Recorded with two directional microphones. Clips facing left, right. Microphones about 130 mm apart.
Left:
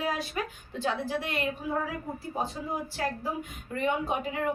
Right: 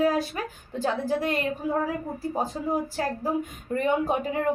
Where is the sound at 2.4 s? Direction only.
35° right (ahead or behind).